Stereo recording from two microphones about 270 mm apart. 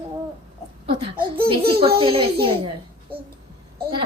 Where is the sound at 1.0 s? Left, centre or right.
Centre.